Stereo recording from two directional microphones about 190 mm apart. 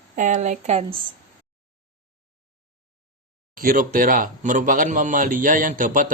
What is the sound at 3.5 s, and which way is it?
Speech, 45° right (ahead or behind).